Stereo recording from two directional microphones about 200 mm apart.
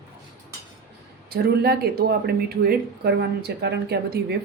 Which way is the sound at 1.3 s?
50° right (ahead or behind).